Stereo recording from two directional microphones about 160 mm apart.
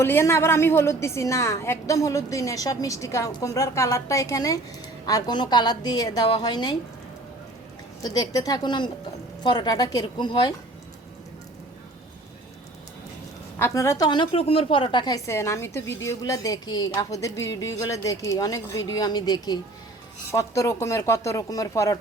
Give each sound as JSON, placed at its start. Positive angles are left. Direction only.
{"t": 0.0, "sound": "a woman's voice", "side_deg": 15}
{"t": 8.0, "sound": "a woman's voice", "side_deg": 25}
{"t": 13.6, "sound": "a woman's voice", "side_deg": 15}